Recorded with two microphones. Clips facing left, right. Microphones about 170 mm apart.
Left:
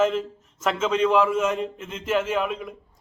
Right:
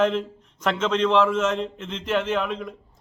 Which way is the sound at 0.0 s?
5° left (ahead or behind).